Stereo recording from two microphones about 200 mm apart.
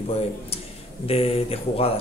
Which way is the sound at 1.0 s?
30° left (ahead or behind).